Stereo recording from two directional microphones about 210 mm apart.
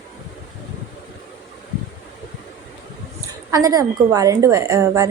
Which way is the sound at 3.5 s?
15° right (ahead or behind).